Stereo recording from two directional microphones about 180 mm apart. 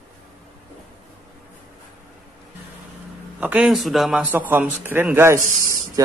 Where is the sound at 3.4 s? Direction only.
10° right (ahead or behind).